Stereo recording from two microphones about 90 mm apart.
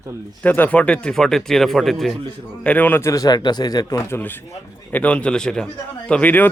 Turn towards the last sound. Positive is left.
turn(degrees=20)  # may be behind; listen again after turning